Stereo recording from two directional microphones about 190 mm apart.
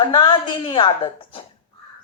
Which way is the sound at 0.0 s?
25° left (ahead or behind).